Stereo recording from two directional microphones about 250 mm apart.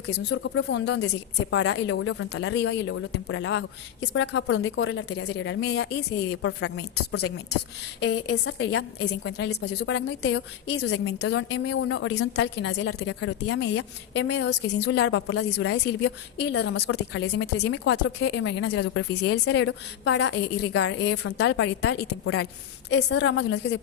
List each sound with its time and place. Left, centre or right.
0.1 s a woman's voice: left
5.7 s a woman's voice: left
10.8 s a woman's voice: left